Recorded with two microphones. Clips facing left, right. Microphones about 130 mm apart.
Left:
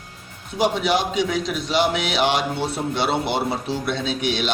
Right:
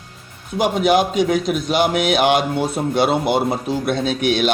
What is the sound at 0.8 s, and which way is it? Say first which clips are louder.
Speech: right 5 dB; 50° right (ahead or behind).